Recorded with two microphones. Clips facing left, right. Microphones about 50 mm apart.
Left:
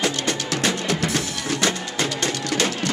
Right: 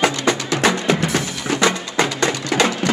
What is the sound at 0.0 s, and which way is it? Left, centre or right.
Music, right.